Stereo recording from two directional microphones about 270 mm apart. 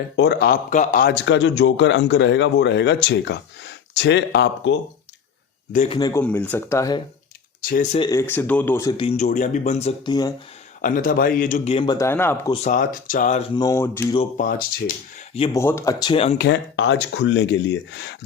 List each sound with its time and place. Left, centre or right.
0.2 s a man's voice: left
5.7 s speech: left
6.0 s speech: centre
7.6 s speech: left
7.9 s speech: centre
10.8 s speech: left; by 12.5 s centre
12.6 s speech: left
13.6 s speech: centre
14.2 s speech: left
15.5 s speech: centre
16.4 s a man's voice: left